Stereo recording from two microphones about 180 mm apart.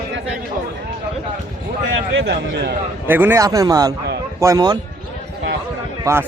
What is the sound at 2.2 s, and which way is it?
Speech, 70° right (ahead or behind).